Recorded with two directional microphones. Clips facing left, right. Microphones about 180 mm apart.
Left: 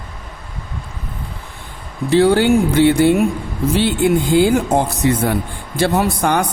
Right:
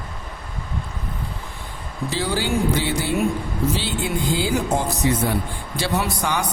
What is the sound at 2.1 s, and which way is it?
Speech, 60° left (ahead or behind).